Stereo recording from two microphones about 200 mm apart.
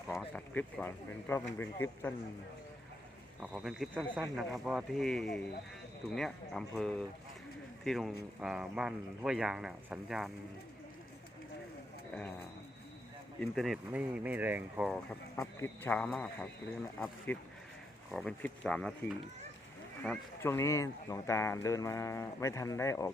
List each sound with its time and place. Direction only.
0.1 s speech: centre (ahead or behind)
3.4 s speech: 5° right (ahead or behind)
13.4 s speech: centre (ahead or behind)
15.4 s speech: 10° left (ahead or behind)
20.0 s speech: 10° left (ahead or behind)